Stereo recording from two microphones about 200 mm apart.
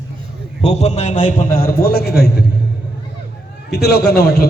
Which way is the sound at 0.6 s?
35° left (ahead or behind).